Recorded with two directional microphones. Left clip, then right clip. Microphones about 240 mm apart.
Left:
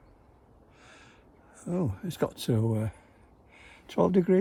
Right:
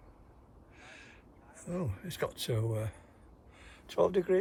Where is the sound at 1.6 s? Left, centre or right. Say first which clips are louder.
Left 6 dB; centre.